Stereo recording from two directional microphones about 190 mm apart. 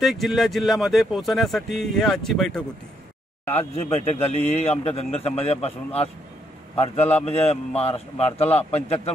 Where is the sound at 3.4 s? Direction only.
35° left (ahead or behind).